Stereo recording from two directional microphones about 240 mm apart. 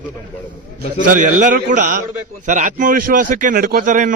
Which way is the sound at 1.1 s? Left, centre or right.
Right.